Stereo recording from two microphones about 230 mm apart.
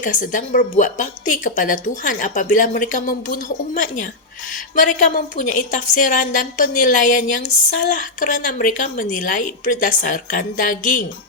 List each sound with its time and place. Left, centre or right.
0.0 s a woman's voice: left
4.7 s a woman's voice: left